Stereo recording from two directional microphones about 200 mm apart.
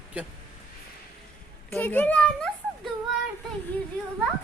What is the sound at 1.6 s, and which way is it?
Speech, 10° left (ahead or behind).